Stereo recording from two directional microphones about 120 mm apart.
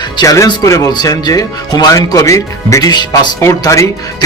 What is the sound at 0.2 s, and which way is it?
A man's voice, 30° left (ahead or behind).